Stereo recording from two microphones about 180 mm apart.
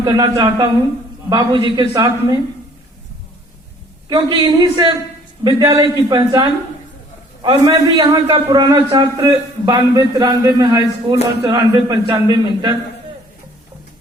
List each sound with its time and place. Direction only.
0.0 s a man's voice: 20° right (ahead or behind)
4.1 s a man's voice: 25° right (ahead or behind)